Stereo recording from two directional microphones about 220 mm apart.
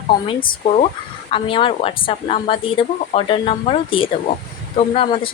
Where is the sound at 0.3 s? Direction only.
25° left (ahead or behind).